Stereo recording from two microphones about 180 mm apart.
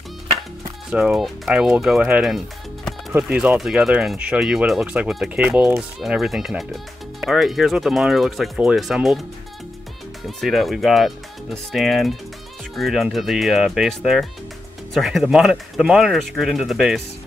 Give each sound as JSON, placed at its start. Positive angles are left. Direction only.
{"t": 0.8, "sound": "speech", "side_deg": -5}
{"t": 10.4, "sound": "speech", "side_deg": 0}